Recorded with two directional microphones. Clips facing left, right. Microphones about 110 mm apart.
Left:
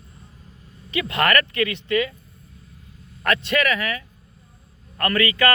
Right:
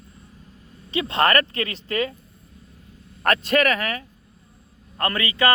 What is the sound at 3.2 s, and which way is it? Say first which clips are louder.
Speech: right 2 dB; 40° right (ahead or behind).